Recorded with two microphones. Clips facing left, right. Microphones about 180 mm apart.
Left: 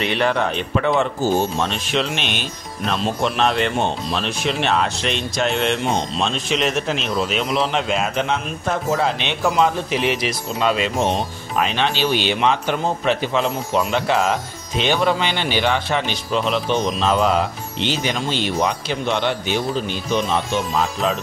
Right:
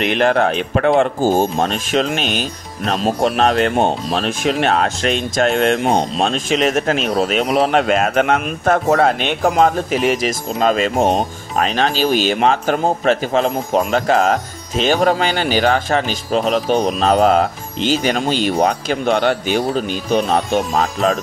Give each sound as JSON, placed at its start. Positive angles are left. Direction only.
{"t": 0.7, "sound": "speech", "side_deg": -55}